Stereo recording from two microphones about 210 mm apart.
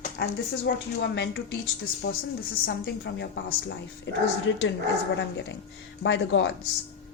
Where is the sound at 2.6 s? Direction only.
55° left (ahead or behind).